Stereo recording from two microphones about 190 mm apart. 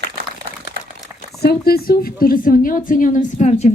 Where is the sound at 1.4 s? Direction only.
55° left (ahead or behind).